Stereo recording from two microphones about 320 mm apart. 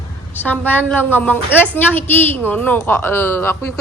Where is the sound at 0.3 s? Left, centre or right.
Centre.